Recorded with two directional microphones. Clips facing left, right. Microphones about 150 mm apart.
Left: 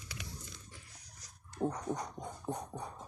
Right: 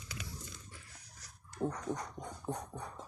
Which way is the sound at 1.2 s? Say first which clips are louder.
Left 1 dB; 15° left (ahead or behind).